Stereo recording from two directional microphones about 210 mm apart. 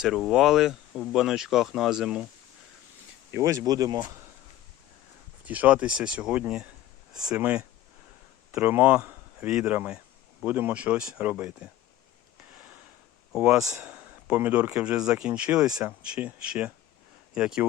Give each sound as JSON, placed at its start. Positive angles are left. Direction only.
{"t": 0.0, "sound": "speech", "side_deg": 0}
{"t": 3.3, "sound": "speech", "side_deg": -15}
{"t": 5.5, "sound": "speech", "side_deg": -5}
{"t": 13.3, "sound": "speech", "side_deg": -5}